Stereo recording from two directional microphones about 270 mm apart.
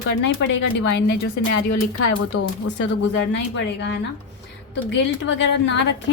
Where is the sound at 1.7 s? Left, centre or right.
Left.